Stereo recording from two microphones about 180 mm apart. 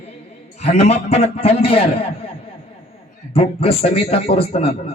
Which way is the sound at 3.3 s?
30° left (ahead or behind).